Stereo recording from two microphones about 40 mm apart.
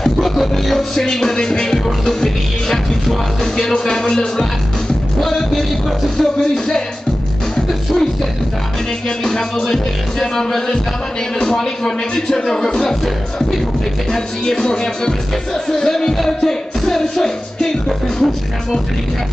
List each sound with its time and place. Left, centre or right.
0.0 s music: centre
0.9 s music: centre
5.2 s music: centre
6.4 s music: left
9.2 s music: centre
12.8 s music: centre